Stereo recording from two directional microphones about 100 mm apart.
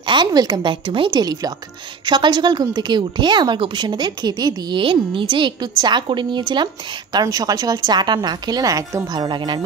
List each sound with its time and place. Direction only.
0.0 s a woman's voice: 50° right (ahead or behind)
1.2 s speech: 40° right (ahead or behind)
2.0 s a woman's voice: 50° right (ahead or behind)
4.7 s a woman's voice: 60° right (ahead or behind)